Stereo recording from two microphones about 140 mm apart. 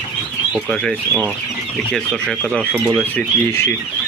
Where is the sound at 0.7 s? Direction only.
5° left (ahead or behind).